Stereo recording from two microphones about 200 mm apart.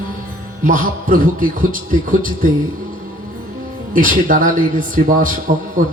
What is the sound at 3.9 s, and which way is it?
A man's voice, 45° right (ahead or behind).